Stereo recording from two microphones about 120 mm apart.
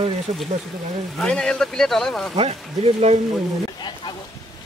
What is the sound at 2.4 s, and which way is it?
Speech, 60° right (ahead or behind).